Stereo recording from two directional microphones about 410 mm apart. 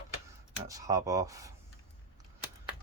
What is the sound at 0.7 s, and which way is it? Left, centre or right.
Speech, centre.